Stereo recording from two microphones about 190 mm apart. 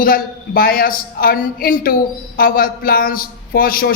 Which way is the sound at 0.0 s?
50° left (ahead or behind).